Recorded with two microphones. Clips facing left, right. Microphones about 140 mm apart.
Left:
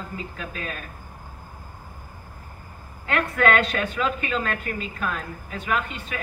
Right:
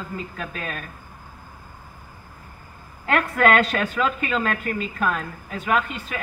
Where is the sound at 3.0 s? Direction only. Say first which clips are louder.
Right 2 dB; 45° right (ahead or behind).